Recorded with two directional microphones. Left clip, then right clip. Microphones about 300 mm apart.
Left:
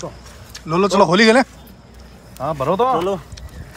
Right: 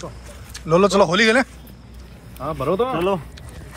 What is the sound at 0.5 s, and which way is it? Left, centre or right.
Speech, centre.